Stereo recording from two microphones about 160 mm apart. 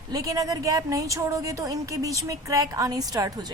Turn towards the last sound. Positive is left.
turn(degrees=-25)  # may be behind; listen again after turning